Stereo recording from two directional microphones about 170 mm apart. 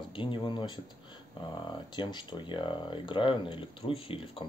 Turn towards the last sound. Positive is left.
turn(degrees=35)  # may be behind; listen again after turning